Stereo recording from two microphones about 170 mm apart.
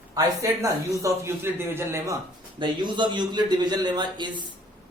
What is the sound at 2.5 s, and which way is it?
A man's voice, 25° right (ahead or behind).